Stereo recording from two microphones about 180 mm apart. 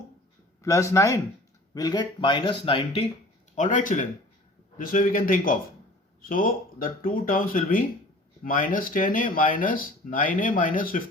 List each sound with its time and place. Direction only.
0.6 s speech: 15° left (ahead or behind)
3.5 s speech: 45° left (ahead or behind)